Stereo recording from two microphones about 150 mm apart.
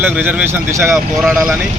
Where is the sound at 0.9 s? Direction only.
Centre (ahead or behind).